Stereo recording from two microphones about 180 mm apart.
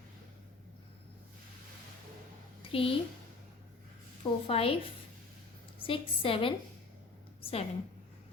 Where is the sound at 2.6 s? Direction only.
30° left (ahead or behind).